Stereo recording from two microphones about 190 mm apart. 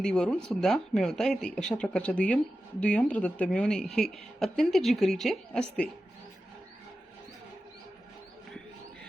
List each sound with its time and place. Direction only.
0.0 s a woman's voice: 5° left (ahead or behind)